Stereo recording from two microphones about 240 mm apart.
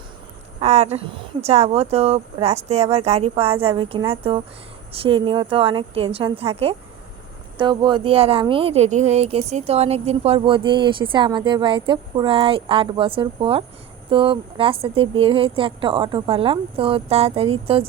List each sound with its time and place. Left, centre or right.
0.6 s speech: right